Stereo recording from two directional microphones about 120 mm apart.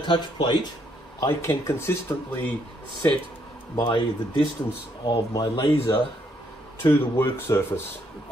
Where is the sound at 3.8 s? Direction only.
40° left (ahead or behind).